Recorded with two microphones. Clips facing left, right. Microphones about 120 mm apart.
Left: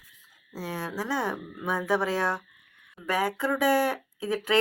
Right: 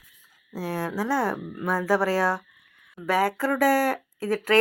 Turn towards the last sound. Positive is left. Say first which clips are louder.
# right 3 dB
turn(degrees=-5)  # may be behind; listen again after turning